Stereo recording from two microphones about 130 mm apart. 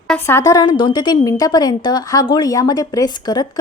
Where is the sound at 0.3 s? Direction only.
25° left (ahead or behind).